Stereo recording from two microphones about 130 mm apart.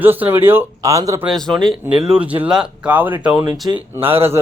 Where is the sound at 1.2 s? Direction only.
Centre (ahead or behind).